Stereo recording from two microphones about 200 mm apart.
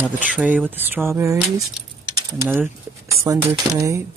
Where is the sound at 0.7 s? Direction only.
10° right (ahead or behind).